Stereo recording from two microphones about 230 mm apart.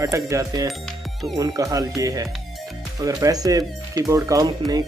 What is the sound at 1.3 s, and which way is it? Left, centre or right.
Speech, centre.